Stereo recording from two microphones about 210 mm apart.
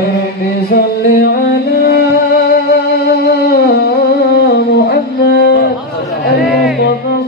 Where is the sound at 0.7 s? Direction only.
50° left (ahead or behind).